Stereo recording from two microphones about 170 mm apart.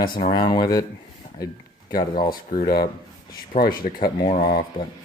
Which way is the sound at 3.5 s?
55° left (ahead or behind).